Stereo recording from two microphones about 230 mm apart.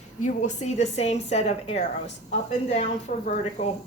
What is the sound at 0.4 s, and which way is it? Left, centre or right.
Speech, left.